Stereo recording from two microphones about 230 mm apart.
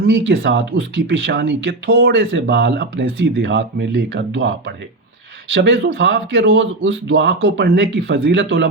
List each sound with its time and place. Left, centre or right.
0.0 s speech: right